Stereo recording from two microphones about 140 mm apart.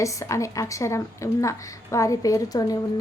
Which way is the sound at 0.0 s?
20° left (ahead or behind).